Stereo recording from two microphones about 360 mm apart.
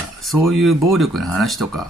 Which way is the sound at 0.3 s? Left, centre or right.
Centre.